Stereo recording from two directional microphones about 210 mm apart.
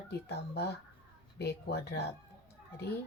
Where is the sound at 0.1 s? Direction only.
50° left (ahead or behind).